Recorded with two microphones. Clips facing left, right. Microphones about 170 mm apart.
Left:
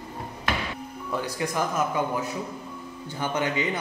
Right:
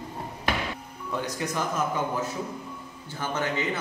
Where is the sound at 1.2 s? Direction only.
10° left (ahead or behind).